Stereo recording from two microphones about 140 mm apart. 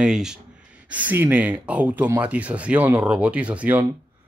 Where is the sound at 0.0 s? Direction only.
5° right (ahead or behind).